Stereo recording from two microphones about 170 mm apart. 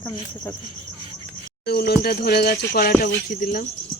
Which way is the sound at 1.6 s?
70° left (ahead or behind).